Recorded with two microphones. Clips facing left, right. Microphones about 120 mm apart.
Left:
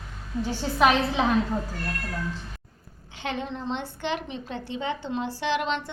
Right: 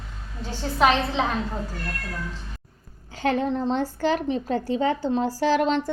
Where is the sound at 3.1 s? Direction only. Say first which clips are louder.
Right 8 dB; 40° right (ahead or behind).